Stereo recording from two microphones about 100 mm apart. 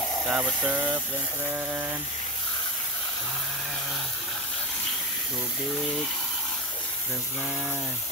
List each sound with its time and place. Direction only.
0.3 s speech: 10° right (ahead or behind)